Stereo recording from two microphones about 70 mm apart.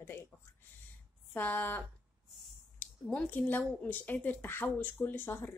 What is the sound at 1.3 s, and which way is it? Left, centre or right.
Speech, left.